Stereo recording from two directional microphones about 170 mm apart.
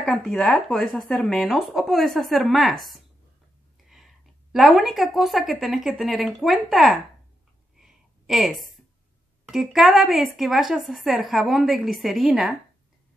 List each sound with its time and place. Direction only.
0.0 s a woman's voice: 5° left (ahead or behind)
7.7 s a sound: centre (ahead or behind)
9.5 s a woman's voice: 5° right (ahead or behind)